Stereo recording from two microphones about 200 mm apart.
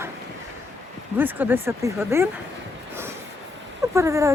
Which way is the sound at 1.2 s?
10° right (ahead or behind).